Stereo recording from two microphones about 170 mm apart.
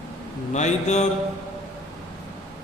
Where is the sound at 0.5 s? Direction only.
45° left (ahead or behind).